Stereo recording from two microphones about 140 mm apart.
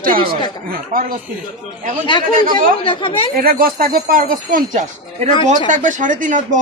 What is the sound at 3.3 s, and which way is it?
Speech, 90° right.